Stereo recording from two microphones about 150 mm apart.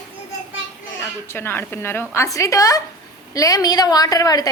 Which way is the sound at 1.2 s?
15° left (ahead or behind).